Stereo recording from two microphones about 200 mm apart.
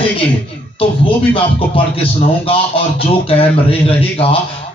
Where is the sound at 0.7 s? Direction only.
25° left (ahead or behind).